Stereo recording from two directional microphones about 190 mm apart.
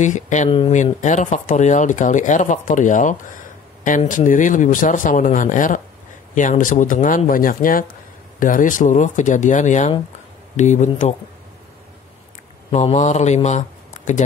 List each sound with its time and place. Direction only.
0.0 s speech: 40° left (ahead or behind)
12.7 s speech: 40° left (ahead or behind)